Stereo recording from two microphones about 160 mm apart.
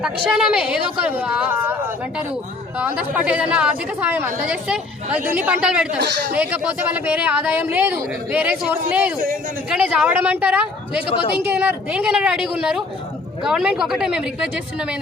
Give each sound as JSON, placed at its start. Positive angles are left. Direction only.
{"t": 0.3, "sound": "a woman's voice", "side_deg": -5}
{"t": 2.7, "sound": "speech", "side_deg": -10}
{"t": 6.0, "sound": "speech", "side_deg": -90}
{"t": 6.3, "sound": "speech", "side_deg": -10}
{"t": 11.1, "sound": "speech", "side_deg": 30}
{"t": 11.3, "sound": "a woman's voice", "side_deg": -10}